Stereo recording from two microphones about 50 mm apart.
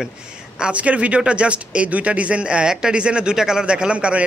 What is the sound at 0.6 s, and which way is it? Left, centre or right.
Speech, right.